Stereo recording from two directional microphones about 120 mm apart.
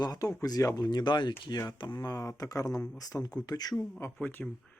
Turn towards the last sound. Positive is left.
turn(degrees=15)  # may be behind; listen again after turning